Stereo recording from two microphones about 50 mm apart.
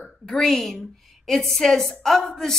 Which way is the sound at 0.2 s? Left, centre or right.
Centre.